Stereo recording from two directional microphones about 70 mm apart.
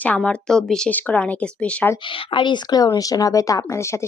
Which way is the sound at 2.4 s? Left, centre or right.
Left.